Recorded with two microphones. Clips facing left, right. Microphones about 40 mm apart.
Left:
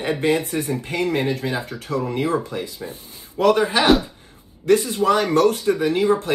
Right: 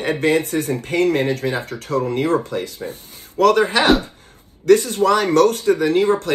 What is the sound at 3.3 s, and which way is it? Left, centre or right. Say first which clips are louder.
Speech: right 3 dB; right.